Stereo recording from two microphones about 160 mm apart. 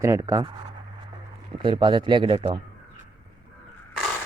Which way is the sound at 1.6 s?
30° right (ahead or behind).